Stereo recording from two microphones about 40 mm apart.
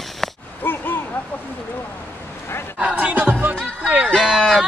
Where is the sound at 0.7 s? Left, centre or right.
Left.